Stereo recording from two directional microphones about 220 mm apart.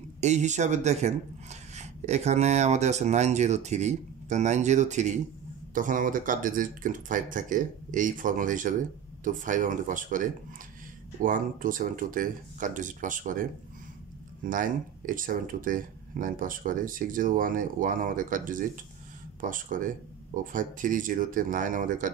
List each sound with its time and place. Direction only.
0.2 s speech: 30° right (ahead or behind)
11.2 s speech: 40° right (ahead or behind)